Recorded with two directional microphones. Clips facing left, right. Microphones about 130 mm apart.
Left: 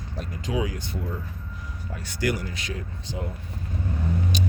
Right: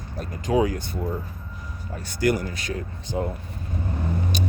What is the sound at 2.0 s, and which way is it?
Speech, 50° right (ahead or behind).